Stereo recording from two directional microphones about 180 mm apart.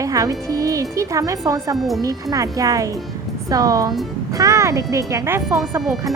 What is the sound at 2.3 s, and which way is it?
Speech, 20° right (ahead or behind).